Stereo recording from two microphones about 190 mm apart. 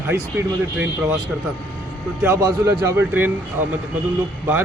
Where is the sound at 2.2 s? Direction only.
15° right (ahead or behind).